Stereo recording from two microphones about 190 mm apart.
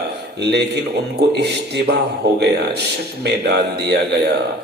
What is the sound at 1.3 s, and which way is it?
Mantra, 60° right (ahead or behind).